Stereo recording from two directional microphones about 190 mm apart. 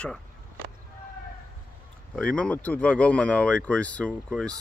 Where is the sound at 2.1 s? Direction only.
5° left (ahead or behind).